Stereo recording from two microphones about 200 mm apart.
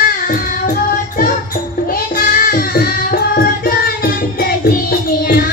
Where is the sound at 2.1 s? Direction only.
45° left (ahead or behind).